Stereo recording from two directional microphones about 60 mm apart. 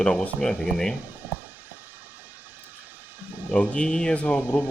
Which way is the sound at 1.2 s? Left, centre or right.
Right.